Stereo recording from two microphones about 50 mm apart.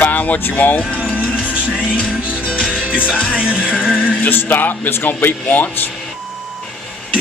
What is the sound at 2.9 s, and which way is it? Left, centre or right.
Music, centre.